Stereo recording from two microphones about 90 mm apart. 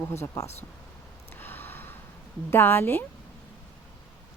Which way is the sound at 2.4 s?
25° left (ahead or behind).